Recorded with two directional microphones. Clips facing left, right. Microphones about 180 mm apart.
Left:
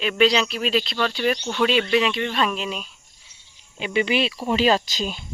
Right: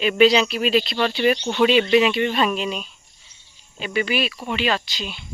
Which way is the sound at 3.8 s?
20° left (ahead or behind).